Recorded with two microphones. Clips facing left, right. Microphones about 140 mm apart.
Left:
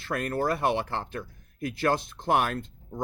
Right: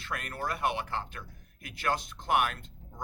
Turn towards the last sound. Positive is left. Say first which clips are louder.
# left 12 dB
turn(degrees=35)  # may be behind; listen again after turning